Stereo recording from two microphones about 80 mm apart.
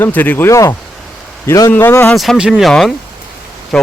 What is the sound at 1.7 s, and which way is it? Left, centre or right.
Speech, left.